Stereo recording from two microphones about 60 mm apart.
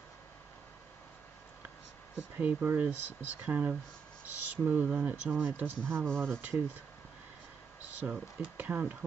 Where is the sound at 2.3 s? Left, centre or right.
Right.